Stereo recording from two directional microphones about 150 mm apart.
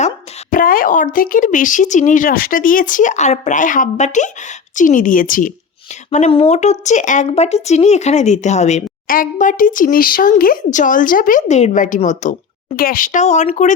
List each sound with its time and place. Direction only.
0.5 s speech: 70° left (ahead or behind)
6.1 s a woman's voice: 45° left (ahead or behind)
9.0 s speech: 65° left (ahead or behind)